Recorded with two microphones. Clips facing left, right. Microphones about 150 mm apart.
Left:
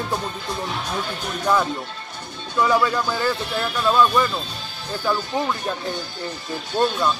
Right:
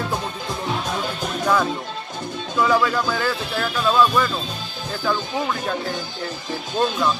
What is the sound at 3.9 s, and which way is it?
Speech, 5° right (ahead or behind).